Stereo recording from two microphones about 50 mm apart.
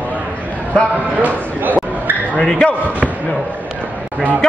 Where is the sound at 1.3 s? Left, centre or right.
Right.